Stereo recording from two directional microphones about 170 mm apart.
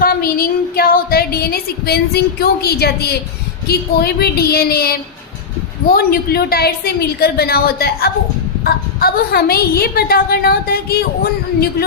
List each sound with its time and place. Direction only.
0.0 s a woman's voice: 60° left (ahead or behind)